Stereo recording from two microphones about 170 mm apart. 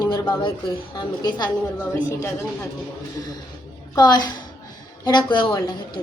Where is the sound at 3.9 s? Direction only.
25° left (ahead or behind).